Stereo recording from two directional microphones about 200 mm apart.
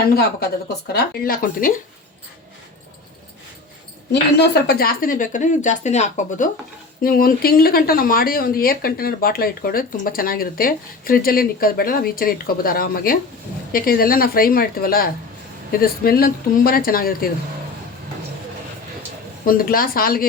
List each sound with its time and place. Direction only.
0.0 s speech: 50° left (ahead or behind)
4.6 s speech: 50° left (ahead or behind)
19.5 s speech: 45° left (ahead or behind)